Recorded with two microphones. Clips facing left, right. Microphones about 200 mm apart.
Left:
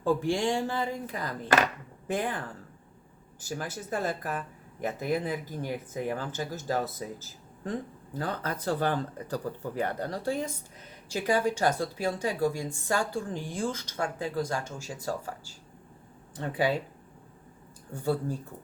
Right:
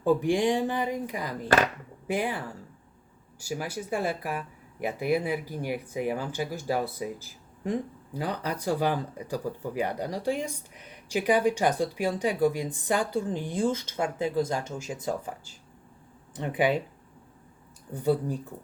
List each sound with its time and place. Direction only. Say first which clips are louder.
0.0 s speech: right 3 dB; 15° right (ahead or behind)
17.9 s speech: right 3 dB; 15° right (ahead or behind)